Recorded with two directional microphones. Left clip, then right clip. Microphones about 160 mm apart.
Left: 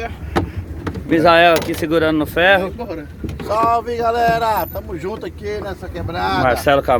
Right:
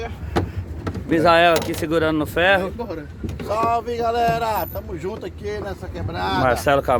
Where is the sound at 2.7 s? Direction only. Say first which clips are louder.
Left 2 dB; 65° right (ahead or behind).